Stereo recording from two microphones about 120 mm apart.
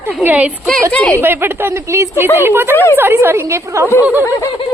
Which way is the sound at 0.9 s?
10° left (ahead or behind).